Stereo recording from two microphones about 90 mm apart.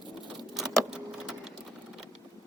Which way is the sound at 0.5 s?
Centre (ahead or behind).